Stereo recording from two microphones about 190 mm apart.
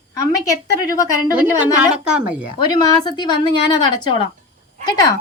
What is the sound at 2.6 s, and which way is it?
A woman's voice, 20° left (ahead or behind).